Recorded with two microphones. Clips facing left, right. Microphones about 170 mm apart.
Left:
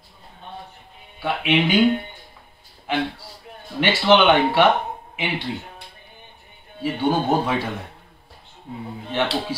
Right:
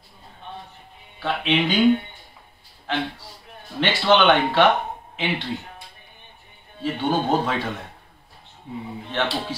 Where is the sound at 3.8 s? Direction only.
10° left (ahead or behind).